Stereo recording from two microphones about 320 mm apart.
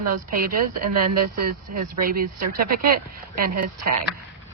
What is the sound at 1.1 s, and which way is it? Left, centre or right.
Speech, right.